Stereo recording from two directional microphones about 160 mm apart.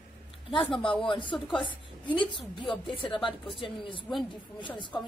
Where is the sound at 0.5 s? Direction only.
30° left (ahead or behind).